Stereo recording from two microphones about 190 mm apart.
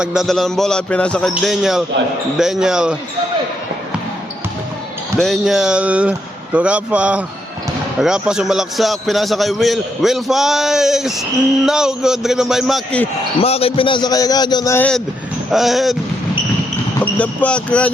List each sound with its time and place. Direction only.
0.0 s a man's voice: 5° right (ahead or behind)
5.2 s a man's voice: centre (ahead or behind)
13.4 s a man's voice: 30° left (ahead or behind); by 16.0 s centre (ahead or behind)
17.2 s speech: 5° left (ahead or behind)